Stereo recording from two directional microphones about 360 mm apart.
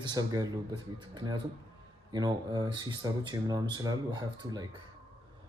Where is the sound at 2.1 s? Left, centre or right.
Centre.